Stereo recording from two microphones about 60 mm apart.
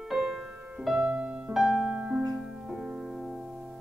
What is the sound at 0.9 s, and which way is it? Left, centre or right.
Music, centre.